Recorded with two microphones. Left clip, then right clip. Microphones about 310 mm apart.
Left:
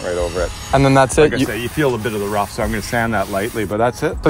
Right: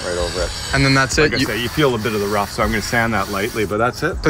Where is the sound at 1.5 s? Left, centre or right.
Left.